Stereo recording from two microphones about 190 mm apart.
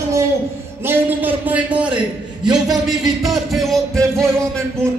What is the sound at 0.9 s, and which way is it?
A man's voice, 10° right (ahead or behind).